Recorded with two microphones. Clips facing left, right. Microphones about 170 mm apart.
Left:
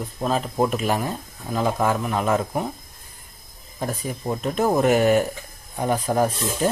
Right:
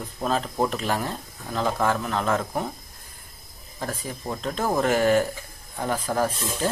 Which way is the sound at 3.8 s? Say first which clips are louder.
Left 4 dB; 15° left (ahead or behind).